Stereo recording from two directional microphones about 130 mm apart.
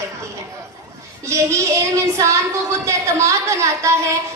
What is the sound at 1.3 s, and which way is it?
A woman's voice, 20° right (ahead or behind).